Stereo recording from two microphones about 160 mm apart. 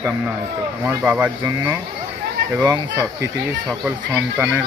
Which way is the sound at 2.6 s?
25° right (ahead or behind).